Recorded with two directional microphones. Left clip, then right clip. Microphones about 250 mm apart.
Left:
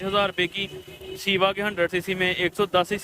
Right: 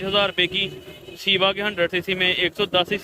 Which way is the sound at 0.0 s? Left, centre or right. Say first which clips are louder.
Right 3 dB; centre.